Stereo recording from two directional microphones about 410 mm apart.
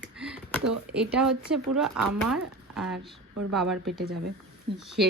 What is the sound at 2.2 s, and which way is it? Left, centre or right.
Speech, centre.